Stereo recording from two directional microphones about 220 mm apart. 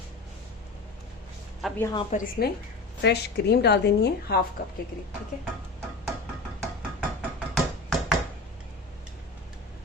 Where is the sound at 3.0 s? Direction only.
50° left (ahead or behind).